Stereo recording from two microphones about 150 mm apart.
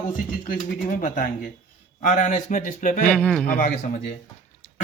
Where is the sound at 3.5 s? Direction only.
65° left (ahead or behind).